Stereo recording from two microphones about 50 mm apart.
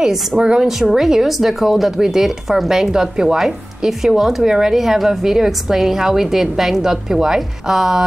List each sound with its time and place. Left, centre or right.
0.0 s a woman's voice: centre
0.4 s speech: centre